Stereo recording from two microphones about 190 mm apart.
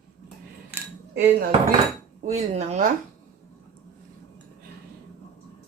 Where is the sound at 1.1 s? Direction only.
60° right (ahead or behind).